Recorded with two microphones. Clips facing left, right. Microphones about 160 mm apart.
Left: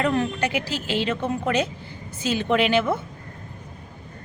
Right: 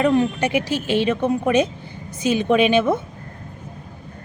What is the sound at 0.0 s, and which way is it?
A woman's voice, 15° right (ahead or behind).